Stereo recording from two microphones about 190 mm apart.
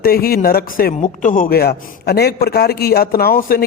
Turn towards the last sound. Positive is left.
turn(degrees=50)  # may be behind; listen again after turning